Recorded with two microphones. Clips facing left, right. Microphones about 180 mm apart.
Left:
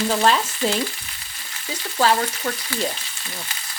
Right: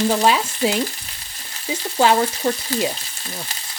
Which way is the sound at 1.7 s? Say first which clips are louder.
Right 3 dB; 25° right (ahead or behind).